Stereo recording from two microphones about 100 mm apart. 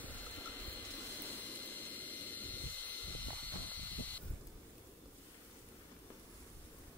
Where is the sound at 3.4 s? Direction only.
15° left (ahead or behind).